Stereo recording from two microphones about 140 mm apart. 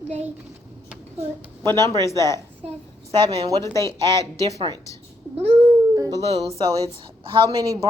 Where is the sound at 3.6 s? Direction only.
20° left (ahead or behind).